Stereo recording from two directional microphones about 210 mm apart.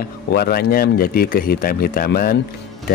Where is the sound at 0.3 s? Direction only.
50° left (ahead or behind).